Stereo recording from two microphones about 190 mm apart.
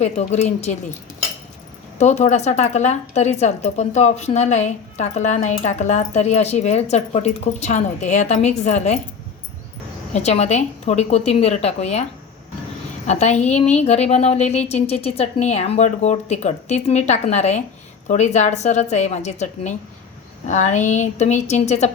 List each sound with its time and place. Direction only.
0.0 s speech: 35° left (ahead or behind)
2.0 s speech: 35° left (ahead or behind)
10.2 s speech: 35° left (ahead or behind)
13.1 s speech: 35° left (ahead or behind)